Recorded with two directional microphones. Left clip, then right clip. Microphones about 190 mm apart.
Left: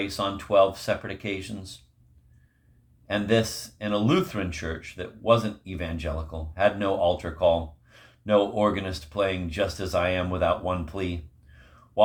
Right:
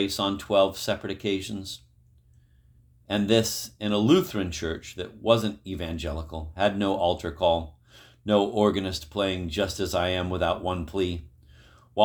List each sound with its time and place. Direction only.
0.0 s speech: 40° right (ahead or behind)
3.1 s speech: 40° right (ahead or behind)